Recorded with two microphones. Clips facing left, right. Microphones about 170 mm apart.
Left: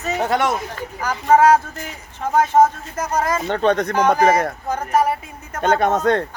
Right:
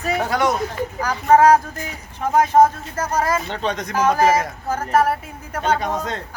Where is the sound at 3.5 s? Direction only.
55° left (ahead or behind).